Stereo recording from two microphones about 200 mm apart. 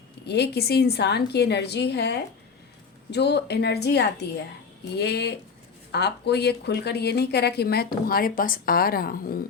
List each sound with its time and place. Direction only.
0.3 s a woman's voice: 55° left (ahead or behind)